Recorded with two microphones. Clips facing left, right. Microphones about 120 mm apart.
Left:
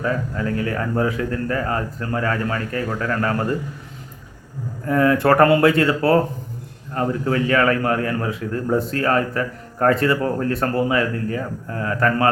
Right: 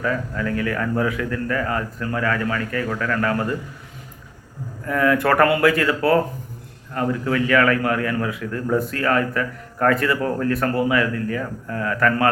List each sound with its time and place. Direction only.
0.0 s a man's voice: 30° left (ahead or behind)
4.9 s a man's voice: 30° left (ahead or behind)